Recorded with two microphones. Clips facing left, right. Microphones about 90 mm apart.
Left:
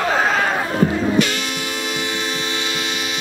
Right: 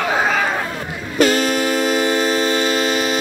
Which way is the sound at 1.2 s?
40° right (ahead or behind).